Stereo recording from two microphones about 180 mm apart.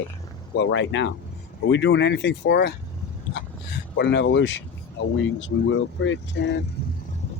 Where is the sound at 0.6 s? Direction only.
90° left.